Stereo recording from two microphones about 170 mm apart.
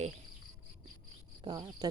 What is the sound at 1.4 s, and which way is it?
Speech, 25° right (ahead or behind).